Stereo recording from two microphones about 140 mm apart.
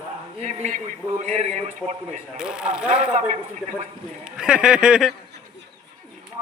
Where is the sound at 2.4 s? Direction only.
5° right (ahead or behind).